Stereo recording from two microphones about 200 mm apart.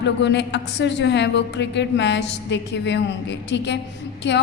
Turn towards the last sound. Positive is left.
turn(degrees=60)  # may be behind; listen again after turning